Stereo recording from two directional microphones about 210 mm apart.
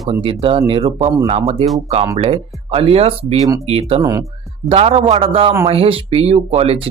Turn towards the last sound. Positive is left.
turn(degrees=-30)  # may be behind; listen again after turning